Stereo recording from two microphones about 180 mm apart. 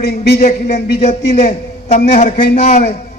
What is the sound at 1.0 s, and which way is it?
A man's voice, 40° left (ahead or behind).